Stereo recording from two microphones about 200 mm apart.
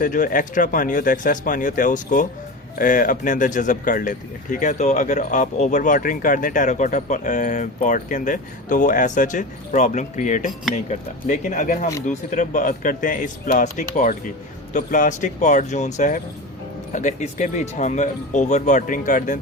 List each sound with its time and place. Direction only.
0.0 s speech: 40° left (ahead or behind)